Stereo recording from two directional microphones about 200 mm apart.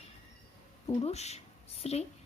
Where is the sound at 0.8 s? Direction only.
30° left (ahead or behind).